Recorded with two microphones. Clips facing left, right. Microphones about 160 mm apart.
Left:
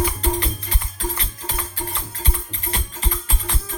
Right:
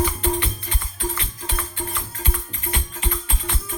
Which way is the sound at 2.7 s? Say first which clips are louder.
Even; 35° left (ahead or behind).